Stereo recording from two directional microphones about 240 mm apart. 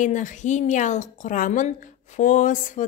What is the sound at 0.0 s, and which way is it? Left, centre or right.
Speech, left.